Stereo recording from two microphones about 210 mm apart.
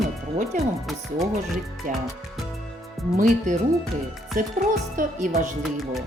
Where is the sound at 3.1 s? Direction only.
35° right (ahead or behind).